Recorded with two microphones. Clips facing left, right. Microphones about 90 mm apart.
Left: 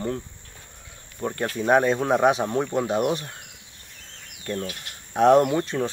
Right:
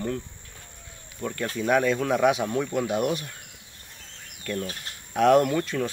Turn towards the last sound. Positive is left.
turn(degrees=25)  # may be behind; listen again after turning